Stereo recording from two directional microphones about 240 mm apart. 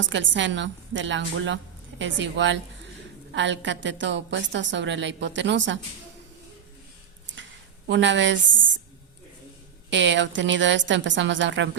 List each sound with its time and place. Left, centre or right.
0.0 s a woman's voice: right
7.9 s a woman's voice: right
9.9 s a woman's voice: right